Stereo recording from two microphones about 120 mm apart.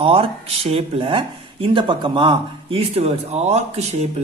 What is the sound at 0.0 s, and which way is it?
Speech, 55° right (ahead or behind).